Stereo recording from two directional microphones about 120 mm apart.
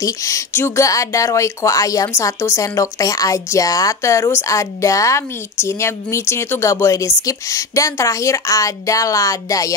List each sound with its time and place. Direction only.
0.0 s speech: 25° left (ahead or behind)